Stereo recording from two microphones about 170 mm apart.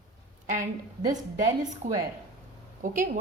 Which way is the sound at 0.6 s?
20° right (ahead or behind).